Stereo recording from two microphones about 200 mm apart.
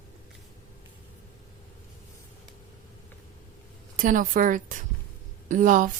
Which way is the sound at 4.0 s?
40° right (ahead or behind).